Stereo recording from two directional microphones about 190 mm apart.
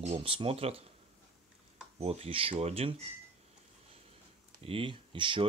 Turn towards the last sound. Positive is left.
turn(degrees=-25)  # may be behind; listen again after turning